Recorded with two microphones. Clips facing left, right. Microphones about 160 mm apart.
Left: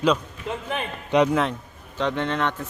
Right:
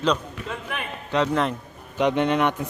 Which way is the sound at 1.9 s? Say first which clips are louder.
Right 4 dB; 15° right (ahead or behind).